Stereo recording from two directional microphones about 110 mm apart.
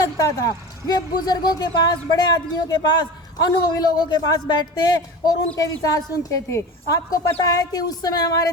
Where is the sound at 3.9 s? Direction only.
40° left (ahead or behind).